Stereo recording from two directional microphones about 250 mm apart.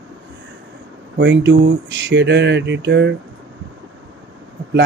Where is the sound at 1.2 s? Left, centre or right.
Right.